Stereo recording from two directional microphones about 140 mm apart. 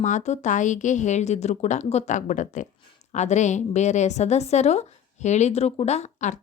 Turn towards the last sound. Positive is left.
turn(degrees=55)  # may be behind; listen again after turning